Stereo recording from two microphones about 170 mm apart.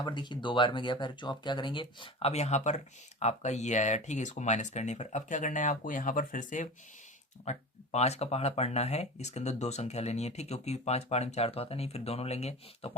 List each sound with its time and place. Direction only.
0.0 s speech: 25° left (ahead or behind)